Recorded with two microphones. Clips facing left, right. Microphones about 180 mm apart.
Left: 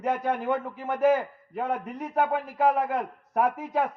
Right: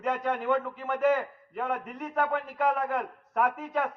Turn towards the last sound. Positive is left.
turn(degrees=20)  # may be behind; listen again after turning